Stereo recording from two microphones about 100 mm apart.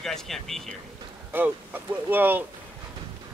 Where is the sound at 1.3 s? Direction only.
20° right (ahead or behind).